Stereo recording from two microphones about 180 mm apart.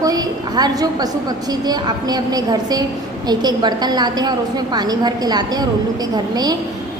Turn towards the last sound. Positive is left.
turn(degrees=-20)  # may be behind; listen again after turning